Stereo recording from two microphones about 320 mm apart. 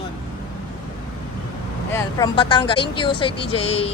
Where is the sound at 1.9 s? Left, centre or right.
Centre.